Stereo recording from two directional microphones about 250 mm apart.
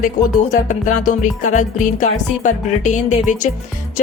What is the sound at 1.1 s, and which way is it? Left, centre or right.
Music, left.